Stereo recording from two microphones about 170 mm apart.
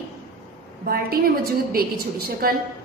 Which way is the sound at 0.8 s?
60° right (ahead or behind).